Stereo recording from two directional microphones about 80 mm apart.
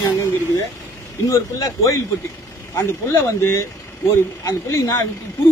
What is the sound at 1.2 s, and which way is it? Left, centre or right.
Speech, left.